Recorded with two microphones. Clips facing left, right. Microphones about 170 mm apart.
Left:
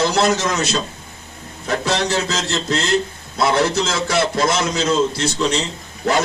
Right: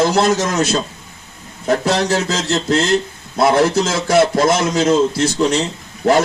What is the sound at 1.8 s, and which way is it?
A man's voice, 50° right (ahead or behind).